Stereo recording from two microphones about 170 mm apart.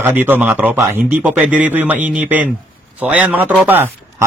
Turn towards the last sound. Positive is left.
turn(degrees=-10)  # may be behind; listen again after turning